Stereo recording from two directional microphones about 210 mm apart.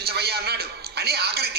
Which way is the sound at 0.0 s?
50° right (ahead or behind).